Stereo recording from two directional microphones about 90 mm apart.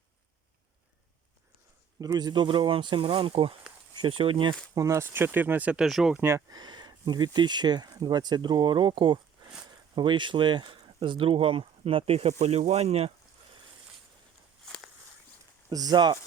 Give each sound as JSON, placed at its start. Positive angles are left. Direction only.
{"t": 2.0, "sound": "speech", "side_deg": -45}
{"t": 4.0, "sound": "speech", "side_deg": -75}
{"t": 4.7, "sound": "speech", "side_deg": -35}
{"t": 5.8, "sound": "speech", "side_deg": -5}
{"t": 6.1, "sound": "speech", "side_deg": -30}
{"t": 6.5, "sound": "speech", "side_deg": -50}
{"t": 14.6, "sound": "walk", "side_deg": 0}
{"t": 15.7, "sound": "speech", "side_deg": -45}